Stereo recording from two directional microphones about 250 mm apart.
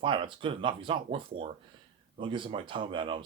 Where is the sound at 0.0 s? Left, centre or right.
Centre.